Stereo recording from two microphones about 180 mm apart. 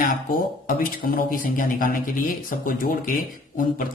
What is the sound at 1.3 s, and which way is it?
Speech, 50° left (ahead or behind).